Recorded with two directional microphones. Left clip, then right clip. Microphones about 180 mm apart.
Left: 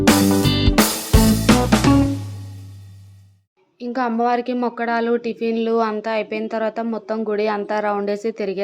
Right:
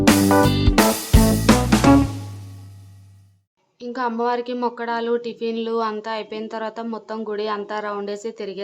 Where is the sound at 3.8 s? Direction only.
15° left (ahead or behind).